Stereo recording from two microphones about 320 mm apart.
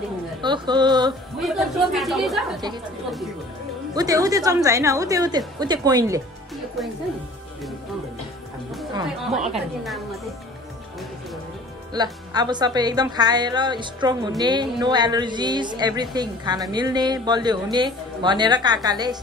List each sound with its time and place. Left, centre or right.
0.4 s speech: centre
1.4 s speech: centre
3.9 s speech: centre
6.8 s speech: centre
8.9 s speech: centre
11.9 s speech: centre